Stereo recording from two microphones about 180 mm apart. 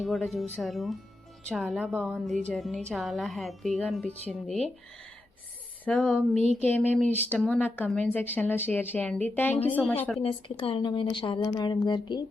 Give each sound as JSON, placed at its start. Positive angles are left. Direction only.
{"t": 0.0, "sound": "a woman's voice", "side_deg": 0}
{"t": 5.8, "sound": "a woman's voice", "side_deg": 5}
{"t": 6.3, "sound": "speech", "side_deg": -35}
{"t": 6.7, "sound": "a woman's voice", "side_deg": 10}
{"t": 10.2, "sound": "speech", "side_deg": 30}